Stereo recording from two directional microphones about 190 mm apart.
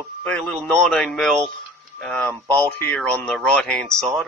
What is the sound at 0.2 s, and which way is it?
Speech, centre (ahead or behind).